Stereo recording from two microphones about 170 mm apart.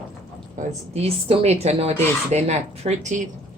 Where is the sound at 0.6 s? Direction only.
40° right (ahead or behind).